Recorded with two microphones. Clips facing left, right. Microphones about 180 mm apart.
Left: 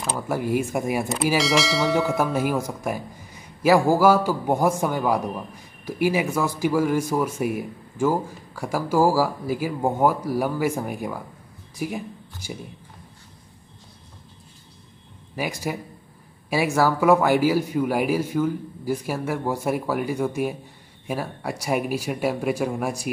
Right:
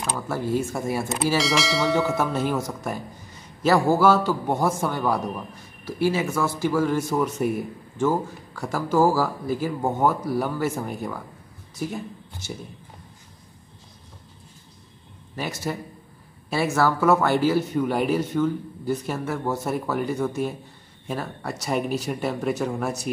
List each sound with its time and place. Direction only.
0.3 s a man's voice: 15° left (ahead or behind)
1.4 s a man's voice: centre (ahead or behind)
15.3 s a man's voice: 10° left (ahead or behind)